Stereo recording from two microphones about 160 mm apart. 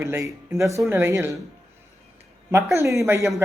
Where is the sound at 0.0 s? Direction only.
15° right (ahead or behind).